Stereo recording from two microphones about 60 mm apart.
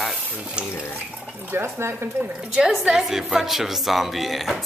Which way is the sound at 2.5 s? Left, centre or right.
Centre.